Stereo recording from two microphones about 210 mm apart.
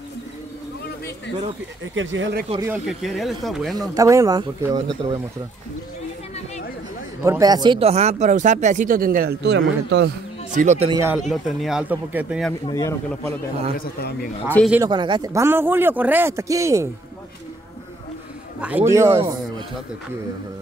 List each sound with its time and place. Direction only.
2.0 s speech: 65° right (ahead or behind)
2.9 s speech: centre (ahead or behind)
3.9 s speech: 15° right (ahead or behind)
7.2 s speech: 15° right (ahead or behind); by 10.1 s 55° right (ahead or behind)
10.5 s speech: 35° right (ahead or behind)
10.9 s speech: 15° right (ahead or behind)
11.1 s speech: centre (ahead or behind)
12.6 s speech: 15° left (ahead or behind)
13.7 s speech: 45° left (ahead or behind)
14.7 s speech: 15° right (ahead or behind)
18.6 s speech: 5° right (ahead or behind)